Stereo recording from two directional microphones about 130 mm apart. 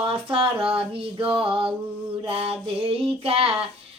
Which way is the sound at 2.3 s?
45° right (ahead or behind).